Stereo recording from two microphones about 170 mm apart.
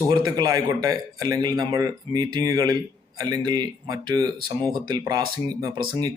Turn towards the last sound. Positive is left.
turn(degrees=-25)  # may be behind; listen again after turning